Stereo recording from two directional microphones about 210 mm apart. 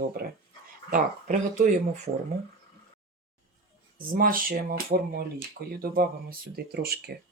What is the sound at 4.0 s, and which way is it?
Speech, 40° right (ahead or behind).